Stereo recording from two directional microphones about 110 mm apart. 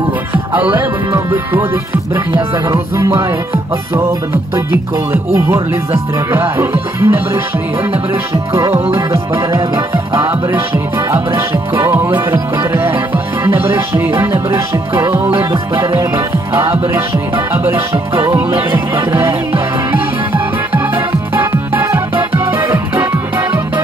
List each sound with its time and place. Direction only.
0.3 s music: 15° right (ahead or behind)
0.7 s speech: 20° right (ahead or behind)
2.7 s speech: 25° right (ahead or behind)
5.1 s speech: 25° right (ahead or behind)
8.3 s speech: 25° right (ahead or behind)
8.9 s music: 25° right (ahead or behind)
10.2 s music: 20° right (ahead or behind)
17.5 s music: 20° right (ahead or behind)
19.1 s music: 20° right (ahead or behind)